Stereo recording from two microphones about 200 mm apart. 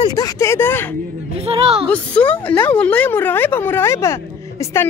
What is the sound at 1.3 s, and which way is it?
Speech, 30° right (ahead or behind).